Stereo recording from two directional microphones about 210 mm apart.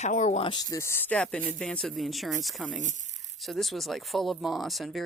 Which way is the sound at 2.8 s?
35° right (ahead or behind).